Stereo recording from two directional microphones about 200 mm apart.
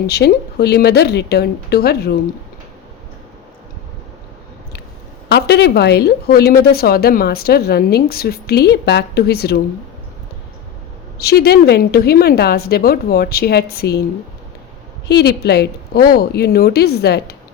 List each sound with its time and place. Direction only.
0.1 s speech: 55° left (ahead or behind)
5.3 s speech: 55° left (ahead or behind)
11.2 s speech: 55° left (ahead or behind)
15.0 s speech: 55° left (ahead or behind)